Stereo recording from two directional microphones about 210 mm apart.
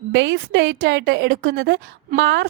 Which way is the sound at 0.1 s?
60° right (ahead or behind).